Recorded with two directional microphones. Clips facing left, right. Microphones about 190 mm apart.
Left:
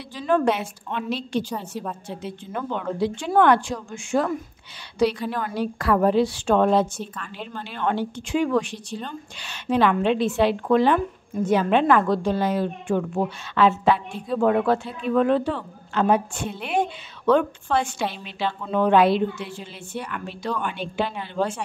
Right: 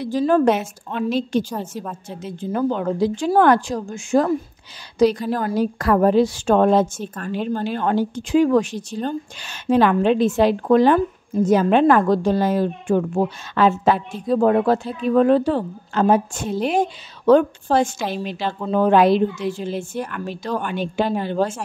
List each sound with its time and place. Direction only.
0.0 s a woman's voice: 40° right (ahead or behind)